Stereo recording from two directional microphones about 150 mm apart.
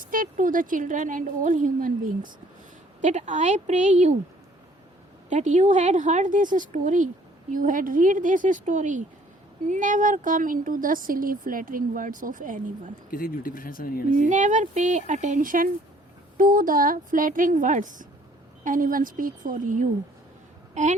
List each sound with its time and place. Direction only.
0.0 s speech: 65° right (ahead or behind)
3.0 s speech: 50° right (ahead or behind)
5.3 s speech: 50° right (ahead or behind)
13.1 s speech: 75° left (ahead or behind)
14.2 s speech: 55° right (ahead or behind)